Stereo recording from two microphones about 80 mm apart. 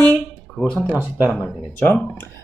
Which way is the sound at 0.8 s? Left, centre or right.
Right.